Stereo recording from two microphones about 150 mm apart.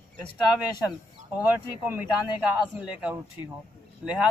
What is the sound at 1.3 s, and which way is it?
A man's voice, 10° right (ahead or behind).